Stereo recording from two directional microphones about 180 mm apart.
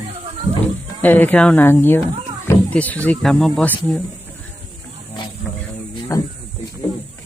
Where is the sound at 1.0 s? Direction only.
10° left (ahead or behind).